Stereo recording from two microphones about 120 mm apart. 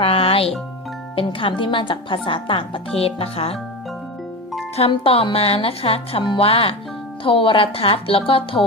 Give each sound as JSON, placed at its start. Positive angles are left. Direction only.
{"t": 0.0, "sound": "speech", "side_deg": 50}
{"t": 4.8, "sound": "speech", "side_deg": 50}